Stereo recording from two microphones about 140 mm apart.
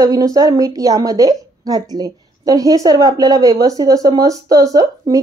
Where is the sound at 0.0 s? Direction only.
25° right (ahead or behind).